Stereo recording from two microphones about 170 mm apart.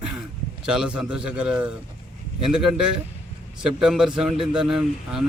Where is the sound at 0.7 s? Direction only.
5° right (ahead or behind).